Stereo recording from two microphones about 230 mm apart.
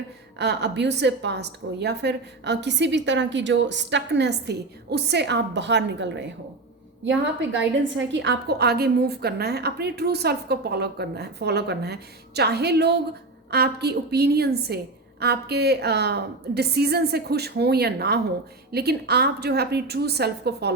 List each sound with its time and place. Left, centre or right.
0.3 s a woman's voice: right
7.9 s a woman's voice: right